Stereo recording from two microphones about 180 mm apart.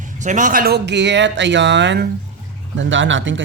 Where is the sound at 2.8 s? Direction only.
90° right.